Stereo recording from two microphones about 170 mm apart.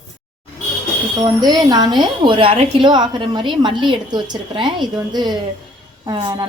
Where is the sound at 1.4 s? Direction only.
25° right (ahead or behind).